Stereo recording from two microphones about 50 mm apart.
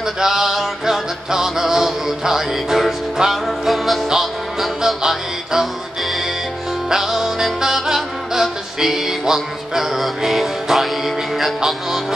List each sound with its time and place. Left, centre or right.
0.0 s music: centre
6.9 s music: centre